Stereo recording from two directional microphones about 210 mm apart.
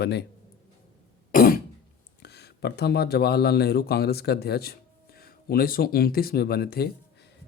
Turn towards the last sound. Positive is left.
turn(degrees=45)  # may be behind; listen again after turning